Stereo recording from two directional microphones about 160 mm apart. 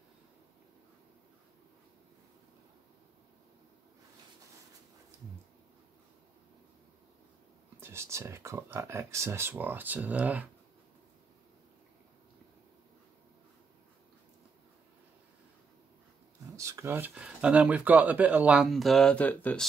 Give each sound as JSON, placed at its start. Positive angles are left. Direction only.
{"t": 7.8, "sound": "speech", "side_deg": -15}
{"t": 16.5, "sound": "speech", "side_deg": -20}